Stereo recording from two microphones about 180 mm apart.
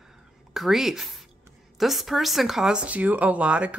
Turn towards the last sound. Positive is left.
turn(degrees=-5)  # may be behind; listen again after turning